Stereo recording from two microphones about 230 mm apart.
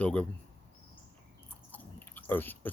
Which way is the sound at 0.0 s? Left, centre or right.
Centre.